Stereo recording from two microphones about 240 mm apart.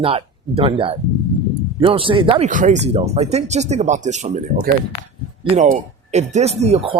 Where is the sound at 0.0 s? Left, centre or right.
Right.